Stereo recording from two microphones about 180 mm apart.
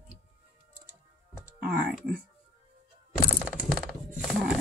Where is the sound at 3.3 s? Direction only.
Centre (ahead or behind).